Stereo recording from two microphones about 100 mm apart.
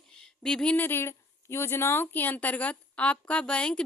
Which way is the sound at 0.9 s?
25° left (ahead or behind).